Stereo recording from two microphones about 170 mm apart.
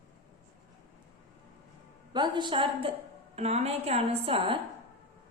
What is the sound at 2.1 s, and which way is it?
A woman's voice, 25° right (ahead or behind).